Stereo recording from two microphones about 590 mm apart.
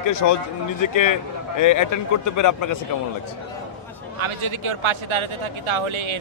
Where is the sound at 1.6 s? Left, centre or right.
Left.